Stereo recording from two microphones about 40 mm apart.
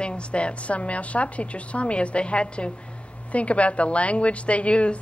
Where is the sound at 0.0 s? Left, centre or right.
Left.